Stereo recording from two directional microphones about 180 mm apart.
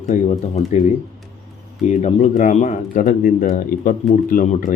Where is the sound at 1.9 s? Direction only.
40° left (ahead or behind).